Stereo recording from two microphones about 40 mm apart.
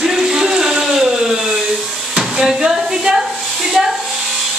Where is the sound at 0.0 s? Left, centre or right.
Centre.